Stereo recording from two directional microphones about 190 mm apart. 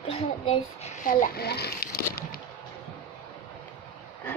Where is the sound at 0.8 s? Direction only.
40° left (ahead or behind).